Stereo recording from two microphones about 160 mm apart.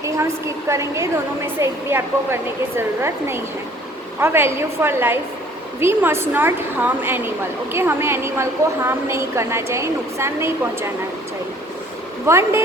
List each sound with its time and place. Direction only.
0.0 s a woman's voice: 20° right (ahead or behind)
12.2 s a woman's voice: 15° right (ahead or behind)